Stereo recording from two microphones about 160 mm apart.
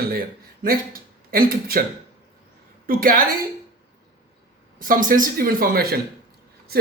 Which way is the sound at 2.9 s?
65° right (ahead or behind).